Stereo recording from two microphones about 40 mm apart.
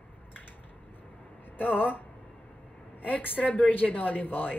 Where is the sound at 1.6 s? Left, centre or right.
Left.